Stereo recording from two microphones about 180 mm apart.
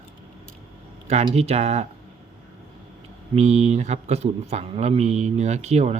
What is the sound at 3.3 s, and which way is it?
Speech, 40° right (ahead or behind).